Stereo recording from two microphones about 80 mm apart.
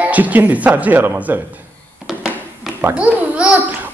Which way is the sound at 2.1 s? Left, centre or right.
Centre.